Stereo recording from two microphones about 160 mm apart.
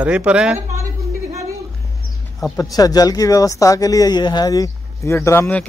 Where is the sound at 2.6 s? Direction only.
25° left (ahead or behind).